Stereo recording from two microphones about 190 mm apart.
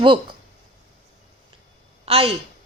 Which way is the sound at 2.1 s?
30° right (ahead or behind).